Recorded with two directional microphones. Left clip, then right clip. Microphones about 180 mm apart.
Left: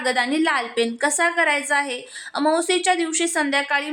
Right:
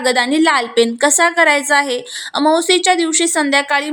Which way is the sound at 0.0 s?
25° right (ahead or behind).